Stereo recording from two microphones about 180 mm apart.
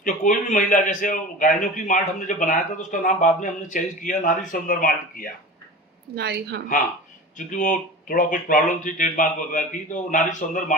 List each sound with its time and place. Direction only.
0.0 s a man's voice: 45° left (ahead or behind)
6.1 s a woman's voice: 65° right (ahead or behind)
7.3 s a man's voice: 45° left (ahead or behind)